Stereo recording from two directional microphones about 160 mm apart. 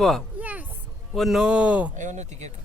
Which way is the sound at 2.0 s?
45° right (ahead or behind).